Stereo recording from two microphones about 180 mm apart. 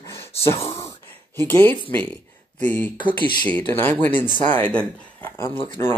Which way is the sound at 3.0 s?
25° left (ahead or behind).